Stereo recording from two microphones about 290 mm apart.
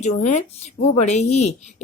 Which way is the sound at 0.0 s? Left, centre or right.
Left.